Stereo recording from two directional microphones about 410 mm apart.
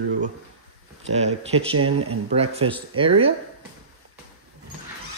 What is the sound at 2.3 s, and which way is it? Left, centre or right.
Speech, centre.